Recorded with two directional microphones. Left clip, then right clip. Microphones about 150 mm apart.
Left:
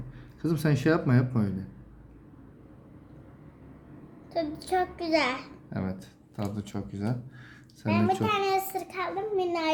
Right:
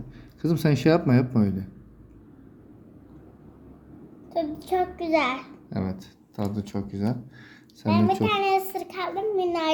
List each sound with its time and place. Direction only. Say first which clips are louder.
0.4 s speech: right 4 dB; 25° right (ahead or behind)
4.3 s child singing: right 3 dB; 15° right (ahead or behind)
5.7 s a child's voice: right 4 dB; 25° right (ahead or behind); by 9.7 s 40° right (ahead or behind)